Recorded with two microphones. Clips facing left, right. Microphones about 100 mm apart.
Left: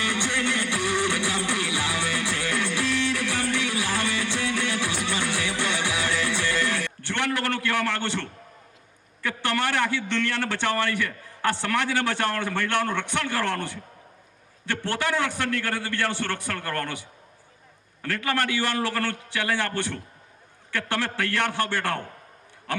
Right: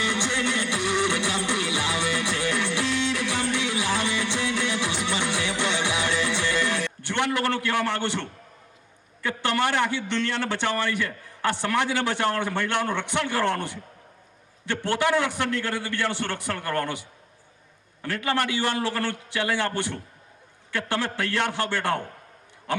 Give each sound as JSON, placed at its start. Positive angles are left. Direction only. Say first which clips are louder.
{"t": 0.0, "sound": "music", "louder": "right 1 dB", "side_deg": -20}
{"t": 9.2, "sound": "a man's voice", "louder": "right 2 dB", "side_deg": -20}